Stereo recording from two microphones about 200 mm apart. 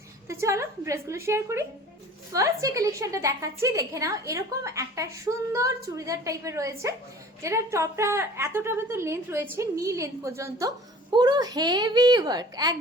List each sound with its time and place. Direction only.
0.3 s a woman's voice: 15° right (ahead or behind)